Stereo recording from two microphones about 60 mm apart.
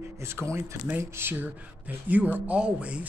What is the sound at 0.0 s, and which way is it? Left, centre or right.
Speech, right.